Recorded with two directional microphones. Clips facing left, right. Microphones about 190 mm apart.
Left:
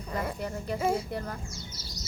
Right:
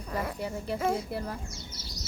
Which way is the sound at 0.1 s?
Centre (ahead or behind).